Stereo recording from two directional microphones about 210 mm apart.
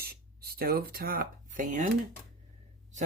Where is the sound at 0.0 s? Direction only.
45° right (ahead or behind).